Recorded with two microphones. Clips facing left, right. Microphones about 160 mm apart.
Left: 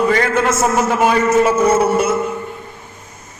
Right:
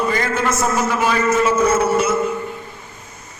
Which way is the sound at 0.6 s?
45° left (ahead or behind).